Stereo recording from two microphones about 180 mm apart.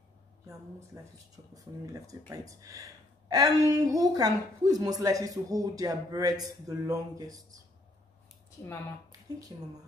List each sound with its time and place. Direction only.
0.9 s speech: 15° right (ahead or behind)
9.5 s speech: 25° right (ahead or behind)